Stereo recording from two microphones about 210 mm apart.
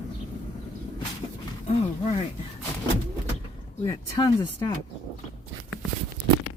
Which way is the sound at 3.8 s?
20° left (ahead or behind).